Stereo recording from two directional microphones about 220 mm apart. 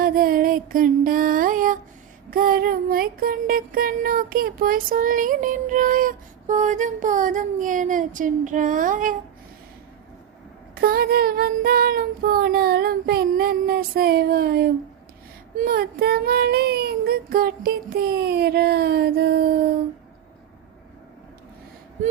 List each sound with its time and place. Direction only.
0.0 s music: 40° right (ahead or behind)
10.8 s child singing: 45° right (ahead or behind)